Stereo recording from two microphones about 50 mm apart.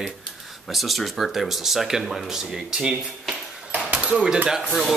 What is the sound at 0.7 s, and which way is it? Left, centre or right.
Speech, centre.